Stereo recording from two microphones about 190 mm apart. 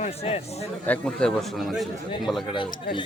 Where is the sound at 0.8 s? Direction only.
5° left (ahead or behind).